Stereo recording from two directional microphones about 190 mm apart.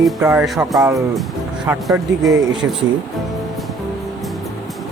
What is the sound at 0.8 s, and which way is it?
Speech, 15° right (ahead or behind).